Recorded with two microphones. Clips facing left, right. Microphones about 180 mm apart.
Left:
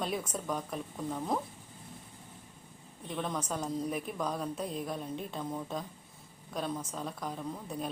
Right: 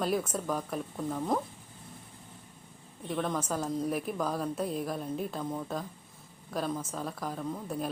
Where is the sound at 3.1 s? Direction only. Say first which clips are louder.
Right 4 dB; centre (ahead or behind).